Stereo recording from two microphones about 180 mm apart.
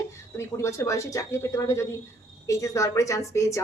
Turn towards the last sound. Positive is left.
turn(degrees=15)  # may be behind; listen again after turning